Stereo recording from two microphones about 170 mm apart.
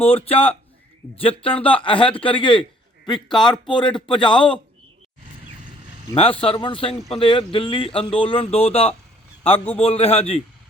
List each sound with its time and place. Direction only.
0.0 s speech: 35° left (ahead or behind)
6.4 s speech: 30° left (ahead or behind)